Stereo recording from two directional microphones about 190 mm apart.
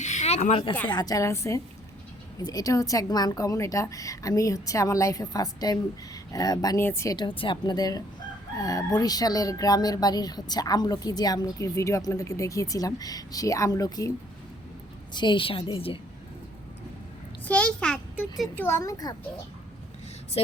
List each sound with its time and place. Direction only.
0.0 s a sound: 35° left (ahead or behind)
0.9 s a woman's voice: 20° left (ahead or behind)
15.1 s speech: 25° left (ahead or behind)
17.4 s a child's voice: 5° left (ahead or behind)